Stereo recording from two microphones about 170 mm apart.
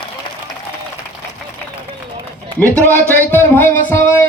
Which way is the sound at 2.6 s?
10° left (ahead or behind).